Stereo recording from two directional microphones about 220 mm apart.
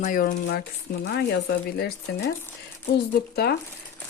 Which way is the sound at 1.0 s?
50° left (ahead or behind).